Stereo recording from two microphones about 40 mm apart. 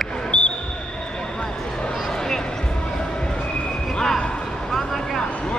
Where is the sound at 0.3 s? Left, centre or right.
Left.